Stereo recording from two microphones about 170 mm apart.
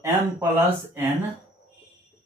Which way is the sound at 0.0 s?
15° right (ahead or behind).